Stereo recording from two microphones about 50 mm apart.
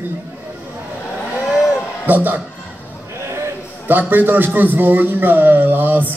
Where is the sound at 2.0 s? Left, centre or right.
Right.